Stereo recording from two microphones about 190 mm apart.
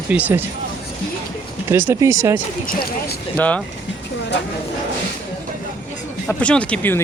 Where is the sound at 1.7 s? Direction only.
15° right (ahead or behind).